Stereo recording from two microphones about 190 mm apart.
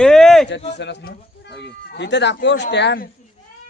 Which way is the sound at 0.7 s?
65° left (ahead or behind).